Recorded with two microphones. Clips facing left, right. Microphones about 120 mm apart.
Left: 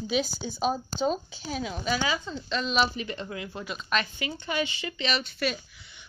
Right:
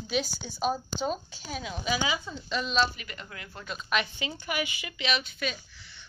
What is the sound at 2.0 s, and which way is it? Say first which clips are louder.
Speech: left 2 dB; 15° right (ahead or behind).